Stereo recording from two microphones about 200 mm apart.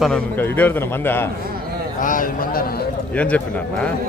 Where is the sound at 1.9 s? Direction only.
40° left (ahead or behind).